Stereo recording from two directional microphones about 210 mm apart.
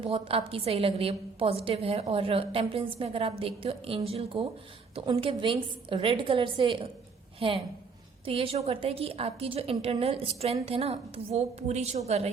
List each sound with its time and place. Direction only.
0.0 s a woman's voice: 25° right (ahead or behind)